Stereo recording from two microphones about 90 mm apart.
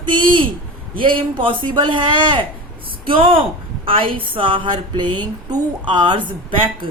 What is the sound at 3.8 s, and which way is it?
Speech, 80° right.